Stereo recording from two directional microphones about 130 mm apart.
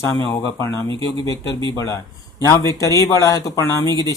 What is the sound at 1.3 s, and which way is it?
Speech, 25° left (ahead or behind).